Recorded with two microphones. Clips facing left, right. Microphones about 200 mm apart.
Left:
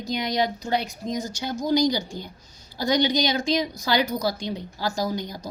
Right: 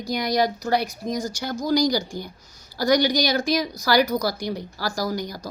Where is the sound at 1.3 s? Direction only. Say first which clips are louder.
Left 1 dB; 20° left (ahead or behind).